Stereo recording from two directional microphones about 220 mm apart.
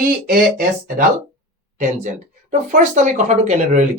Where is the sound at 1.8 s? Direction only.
35° right (ahead or behind).